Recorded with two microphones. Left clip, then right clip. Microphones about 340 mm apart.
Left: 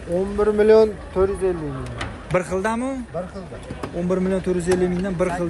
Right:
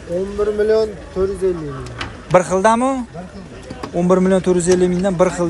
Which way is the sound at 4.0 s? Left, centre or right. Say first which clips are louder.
Right 8 dB; centre.